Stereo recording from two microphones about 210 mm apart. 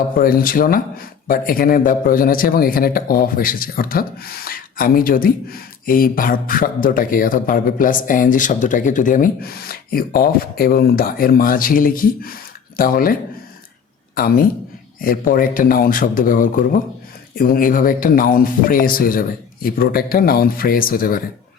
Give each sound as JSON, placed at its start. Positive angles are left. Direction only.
{"t": 0.2, "sound": "speech", "side_deg": 45}
{"t": 14.2, "sound": "speech", "side_deg": 45}